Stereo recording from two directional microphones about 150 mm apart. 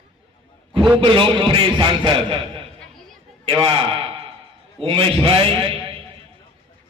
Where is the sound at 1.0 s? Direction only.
35° right (ahead or behind).